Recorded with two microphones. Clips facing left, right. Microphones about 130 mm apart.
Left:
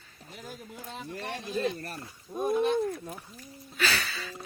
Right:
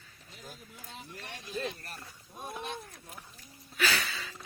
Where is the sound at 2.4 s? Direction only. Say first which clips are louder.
Left 14 dB; 60° left (ahead or behind).